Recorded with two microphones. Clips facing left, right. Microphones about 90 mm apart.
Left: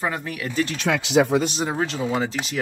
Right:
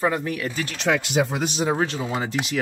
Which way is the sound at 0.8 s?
85° left.